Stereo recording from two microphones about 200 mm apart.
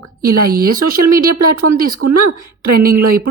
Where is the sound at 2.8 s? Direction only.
45° right (ahead or behind).